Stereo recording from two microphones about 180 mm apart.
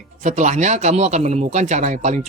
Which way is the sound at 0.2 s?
40° right (ahead or behind).